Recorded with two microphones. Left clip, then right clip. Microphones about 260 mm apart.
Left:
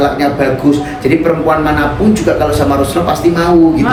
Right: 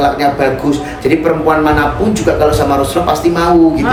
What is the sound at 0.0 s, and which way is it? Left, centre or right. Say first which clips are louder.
A man's voice: right 1 dB; centre.